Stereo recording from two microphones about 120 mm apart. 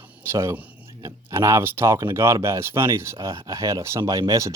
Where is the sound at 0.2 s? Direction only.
25° right (ahead or behind).